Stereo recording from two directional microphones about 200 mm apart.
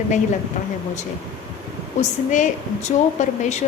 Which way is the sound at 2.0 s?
35° left (ahead or behind).